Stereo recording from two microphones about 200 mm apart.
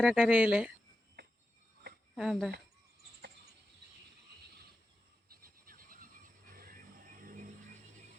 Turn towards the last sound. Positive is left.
turn(degrees=-45)  # may be behind; listen again after turning